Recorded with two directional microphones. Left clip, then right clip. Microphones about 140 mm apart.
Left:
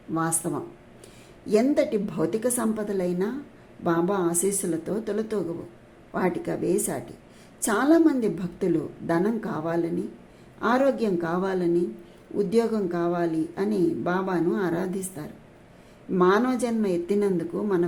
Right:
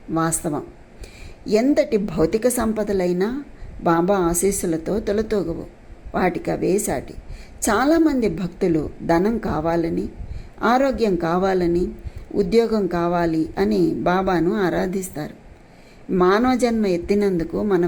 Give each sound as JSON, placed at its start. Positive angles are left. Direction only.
{"t": 0.1, "sound": "a woman's voice", "side_deg": -20}